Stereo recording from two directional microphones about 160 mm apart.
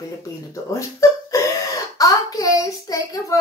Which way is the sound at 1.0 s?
20° left (ahead or behind).